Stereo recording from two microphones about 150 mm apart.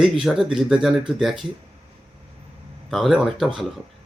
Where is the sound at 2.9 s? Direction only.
Centre (ahead or behind).